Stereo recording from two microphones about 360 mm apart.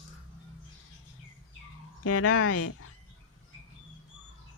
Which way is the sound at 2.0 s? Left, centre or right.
Left.